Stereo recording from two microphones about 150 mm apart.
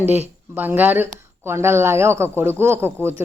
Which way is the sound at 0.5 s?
10° right (ahead or behind).